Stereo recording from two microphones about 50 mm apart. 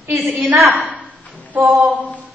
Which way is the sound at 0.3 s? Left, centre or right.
Right.